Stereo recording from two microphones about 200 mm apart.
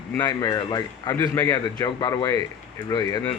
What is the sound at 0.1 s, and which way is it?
Speech, 15° left (ahead or behind).